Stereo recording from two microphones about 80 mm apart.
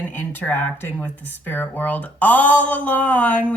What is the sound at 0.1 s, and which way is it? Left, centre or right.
Speech, left.